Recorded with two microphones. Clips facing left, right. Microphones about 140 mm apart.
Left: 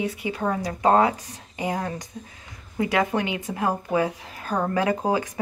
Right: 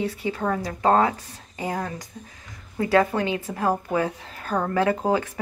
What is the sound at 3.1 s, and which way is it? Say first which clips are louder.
A woman's voice: even; 20° left (ahead or behind).